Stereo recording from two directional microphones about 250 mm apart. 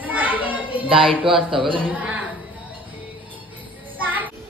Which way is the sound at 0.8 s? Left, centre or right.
Right.